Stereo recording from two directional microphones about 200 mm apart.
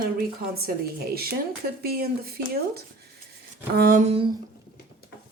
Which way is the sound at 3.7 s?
50° right (ahead or behind).